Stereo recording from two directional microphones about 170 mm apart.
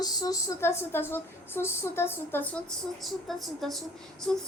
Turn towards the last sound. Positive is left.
turn(degrees=5)  # may be behind; listen again after turning